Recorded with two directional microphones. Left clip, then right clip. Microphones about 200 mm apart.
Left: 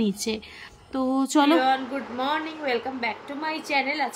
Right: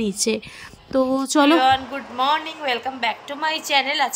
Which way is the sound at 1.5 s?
5° left (ahead or behind).